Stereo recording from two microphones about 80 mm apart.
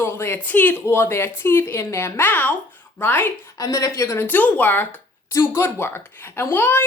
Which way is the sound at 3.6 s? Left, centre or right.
Left.